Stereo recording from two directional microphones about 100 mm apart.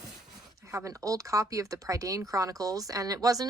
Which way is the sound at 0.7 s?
30° right (ahead or behind).